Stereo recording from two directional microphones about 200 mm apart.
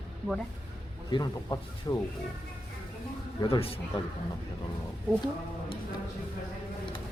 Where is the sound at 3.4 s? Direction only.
25° left (ahead or behind).